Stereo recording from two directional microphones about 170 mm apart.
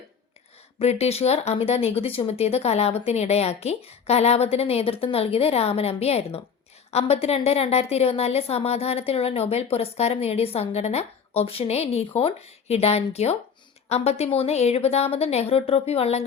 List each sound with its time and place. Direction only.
0.8 s a woman's voice: 40° left (ahead or behind)